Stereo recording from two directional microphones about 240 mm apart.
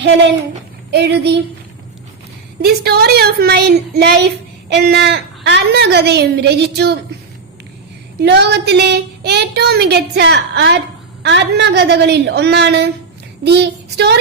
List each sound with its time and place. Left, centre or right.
0.9 s a woman's voice: right
2.6 s a woman's voice: right
8.2 s a woman's voice: right